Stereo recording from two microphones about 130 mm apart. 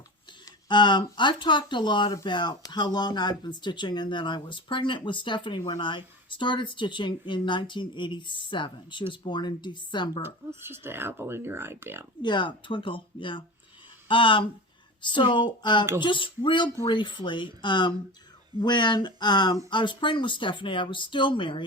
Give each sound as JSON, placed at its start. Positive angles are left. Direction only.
{"t": 0.3, "sound": "speech", "side_deg": 35}
{"t": 10.7, "sound": "speech", "side_deg": -20}
{"t": 12.2, "sound": "speech", "side_deg": 35}